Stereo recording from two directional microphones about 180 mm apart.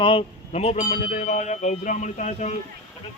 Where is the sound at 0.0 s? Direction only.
30° left (ahead or behind).